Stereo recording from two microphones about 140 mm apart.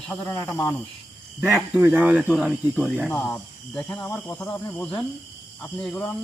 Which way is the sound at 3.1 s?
10° left (ahead or behind).